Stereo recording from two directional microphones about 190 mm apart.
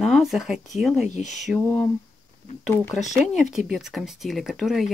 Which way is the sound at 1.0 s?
40° left (ahead or behind).